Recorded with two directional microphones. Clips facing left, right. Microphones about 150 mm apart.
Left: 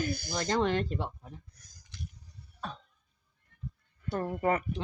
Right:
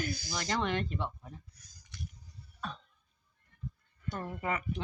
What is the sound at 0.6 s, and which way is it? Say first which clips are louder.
Speech: left 4 dB; 35° left (ahead or behind).